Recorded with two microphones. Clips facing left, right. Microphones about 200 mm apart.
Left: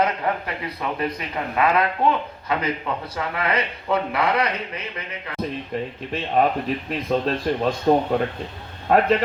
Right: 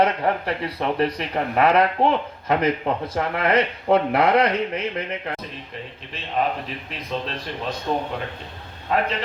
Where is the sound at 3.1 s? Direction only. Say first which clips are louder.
Right 4 dB; 50° right (ahead or behind).